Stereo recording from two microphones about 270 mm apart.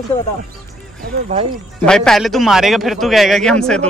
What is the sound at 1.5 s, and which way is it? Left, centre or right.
Speech, centre.